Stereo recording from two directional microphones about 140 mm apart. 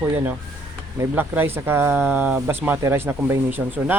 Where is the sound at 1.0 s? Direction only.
15° right (ahead or behind).